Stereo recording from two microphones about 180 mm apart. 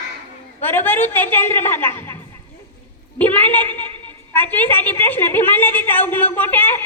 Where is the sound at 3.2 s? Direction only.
10° left (ahead or behind).